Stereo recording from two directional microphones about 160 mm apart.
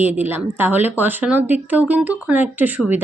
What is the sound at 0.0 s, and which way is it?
Speech, 10° right (ahead or behind).